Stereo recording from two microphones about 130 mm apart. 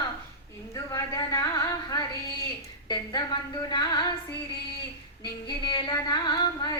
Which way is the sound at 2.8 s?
30° left (ahead or behind).